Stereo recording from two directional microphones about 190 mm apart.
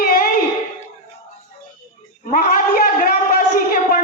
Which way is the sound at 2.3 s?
50° left (ahead or behind).